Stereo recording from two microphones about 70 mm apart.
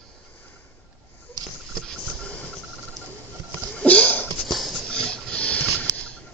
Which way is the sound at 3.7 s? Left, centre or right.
Centre.